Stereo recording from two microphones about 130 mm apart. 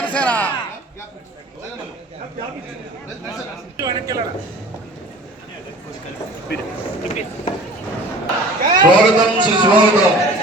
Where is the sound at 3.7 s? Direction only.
25° right (ahead or behind).